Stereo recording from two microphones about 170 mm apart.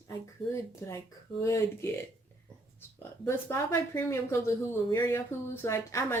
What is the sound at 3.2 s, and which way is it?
A woman's voice, 15° left (ahead or behind).